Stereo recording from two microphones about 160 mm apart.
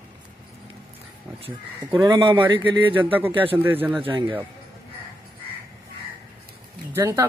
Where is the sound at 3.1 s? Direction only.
10° right (ahead or behind).